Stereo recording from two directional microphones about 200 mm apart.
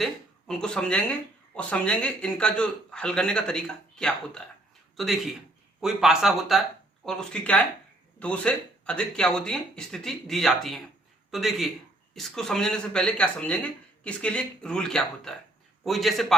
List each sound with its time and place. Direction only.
0.0 s a man's voice: 5° left (ahead or behind)